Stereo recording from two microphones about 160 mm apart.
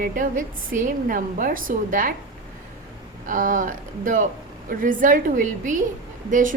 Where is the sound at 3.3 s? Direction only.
55° right (ahead or behind).